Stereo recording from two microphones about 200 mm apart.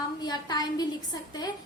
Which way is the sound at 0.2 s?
20° left (ahead or behind).